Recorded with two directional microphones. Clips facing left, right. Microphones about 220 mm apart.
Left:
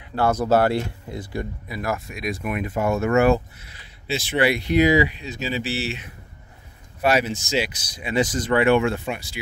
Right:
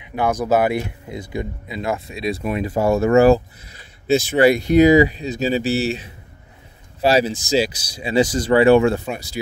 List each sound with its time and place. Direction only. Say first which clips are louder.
0.0 s speech: right 1 dB; 15° right (ahead or behind); by 9.4 s 40° right (ahead or behind)